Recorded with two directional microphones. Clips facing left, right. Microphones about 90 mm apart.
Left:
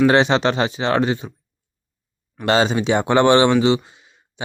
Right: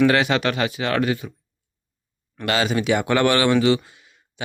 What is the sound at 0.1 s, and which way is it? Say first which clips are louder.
Speech: left 4 dB; 30° left (ahead or behind).